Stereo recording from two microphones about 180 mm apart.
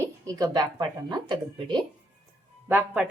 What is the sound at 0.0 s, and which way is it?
A woman's voice, 20° right (ahead or behind).